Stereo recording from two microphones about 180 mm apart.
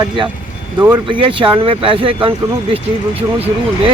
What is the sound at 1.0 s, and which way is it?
Speech, 30° right (ahead or behind).